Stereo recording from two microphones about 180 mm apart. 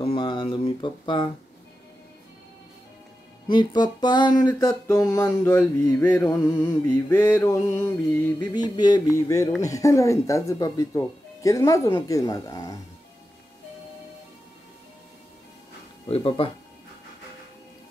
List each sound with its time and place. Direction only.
0.0 s speech: 30° left (ahead or behind)
3.4 s speech: 25° left (ahead or behind)
8.4 s speech: 25° left (ahead or behind)
16.1 s speech: 30° left (ahead or behind)